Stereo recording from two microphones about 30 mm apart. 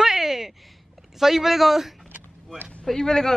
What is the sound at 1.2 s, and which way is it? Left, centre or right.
Speech, centre.